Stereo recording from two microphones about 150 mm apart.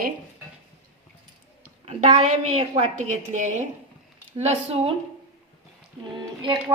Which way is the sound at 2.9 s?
55° right (ahead or behind).